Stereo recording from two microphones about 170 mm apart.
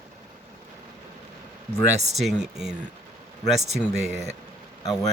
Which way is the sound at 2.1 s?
Centre (ahead or behind).